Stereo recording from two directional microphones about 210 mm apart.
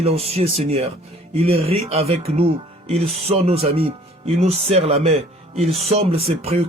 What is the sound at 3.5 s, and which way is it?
Speech, 30° right (ahead or behind).